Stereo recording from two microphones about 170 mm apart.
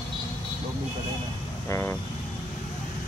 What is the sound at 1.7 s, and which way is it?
Speech, 15° left (ahead or behind).